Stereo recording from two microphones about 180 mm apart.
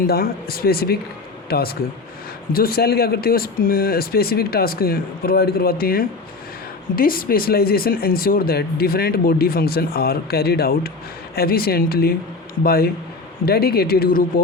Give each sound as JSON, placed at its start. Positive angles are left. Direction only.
{"t": 0.1, "sound": "speech", "side_deg": 55}